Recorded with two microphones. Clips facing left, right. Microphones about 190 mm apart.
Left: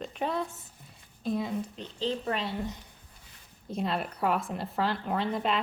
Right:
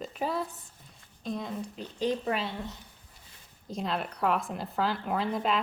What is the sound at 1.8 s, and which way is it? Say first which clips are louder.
Speech: right 2 dB; 10° right (ahead or behind).